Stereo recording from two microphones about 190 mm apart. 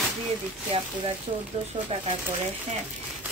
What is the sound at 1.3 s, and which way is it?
Speech, 30° right (ahead or behind).